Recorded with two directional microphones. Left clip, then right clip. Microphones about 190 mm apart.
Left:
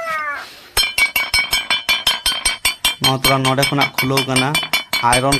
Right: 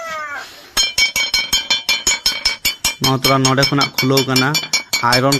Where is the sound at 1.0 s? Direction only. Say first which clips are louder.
Even; 45° right (ahead or behind).